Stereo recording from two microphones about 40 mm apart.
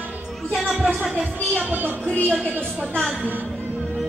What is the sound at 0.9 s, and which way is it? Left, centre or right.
Speech, centre.